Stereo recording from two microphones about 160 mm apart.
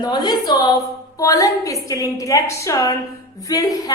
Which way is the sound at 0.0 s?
25° left (ahead or behind).